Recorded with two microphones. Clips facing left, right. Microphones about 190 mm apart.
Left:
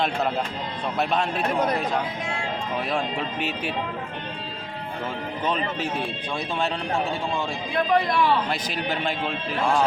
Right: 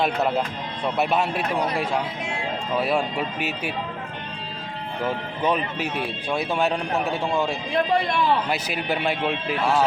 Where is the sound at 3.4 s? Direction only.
5° right (ahead or behind).